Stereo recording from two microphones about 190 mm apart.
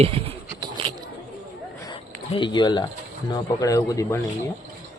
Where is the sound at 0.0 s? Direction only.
30° right (ahead or behind).